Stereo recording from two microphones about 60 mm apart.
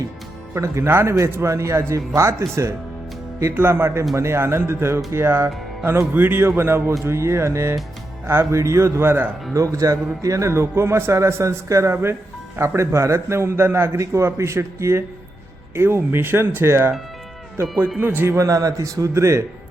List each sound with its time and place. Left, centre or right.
0.5 s a man's voice: right
3.6 s a man's voice: right
9.5 s a man's voice: right
14.0 s a man's voice: right
18.3 s a man's voice: right